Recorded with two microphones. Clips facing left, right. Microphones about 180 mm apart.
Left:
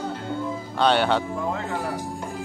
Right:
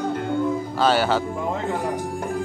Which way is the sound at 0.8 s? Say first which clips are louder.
Even; 5° right (ahead or behind).